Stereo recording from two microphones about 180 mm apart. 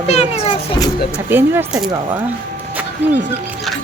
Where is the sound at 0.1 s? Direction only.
35° left (ahead or behind).